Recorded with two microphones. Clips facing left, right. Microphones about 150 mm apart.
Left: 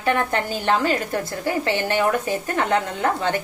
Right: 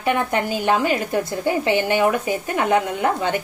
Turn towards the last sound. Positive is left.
turn(degrees=-15)  # may be behind; listen again after turning